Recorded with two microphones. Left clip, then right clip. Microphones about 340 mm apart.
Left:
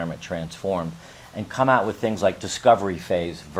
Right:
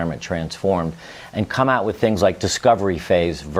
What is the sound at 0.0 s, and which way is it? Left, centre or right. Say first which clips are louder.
Speech: right 5 dB; right.